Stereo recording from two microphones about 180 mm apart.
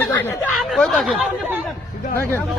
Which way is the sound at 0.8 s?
Centre (ahead or behind).